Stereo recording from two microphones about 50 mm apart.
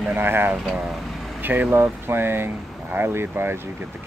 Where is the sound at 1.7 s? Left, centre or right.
Right.